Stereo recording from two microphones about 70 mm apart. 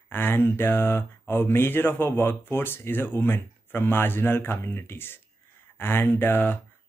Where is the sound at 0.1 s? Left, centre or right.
Left.